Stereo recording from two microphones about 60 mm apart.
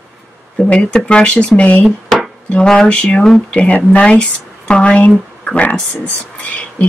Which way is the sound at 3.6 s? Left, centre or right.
Left.